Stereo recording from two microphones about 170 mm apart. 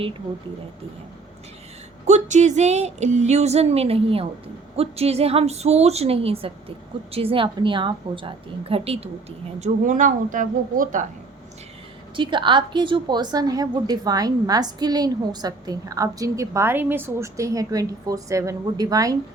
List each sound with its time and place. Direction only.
2.0 s a woman's voice: 45° right (ahead or behind)
12.1 s a woman's voice: 30° right (ahead or behind)